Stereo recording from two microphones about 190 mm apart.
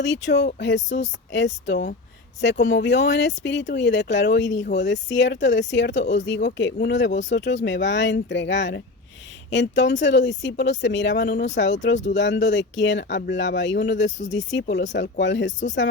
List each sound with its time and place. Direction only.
0.0 s speech: 65° left (ahead or behind)